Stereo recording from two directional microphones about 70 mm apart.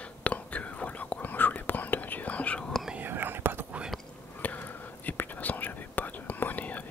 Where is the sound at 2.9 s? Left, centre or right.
Right.